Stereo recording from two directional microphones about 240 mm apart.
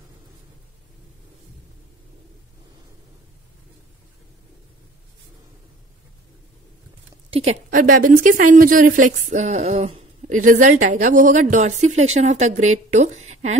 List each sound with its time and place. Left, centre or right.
7.2 s a woman's voice: right